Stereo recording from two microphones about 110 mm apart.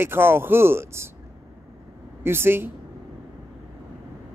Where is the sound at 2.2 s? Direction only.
20° right (ahead or behind).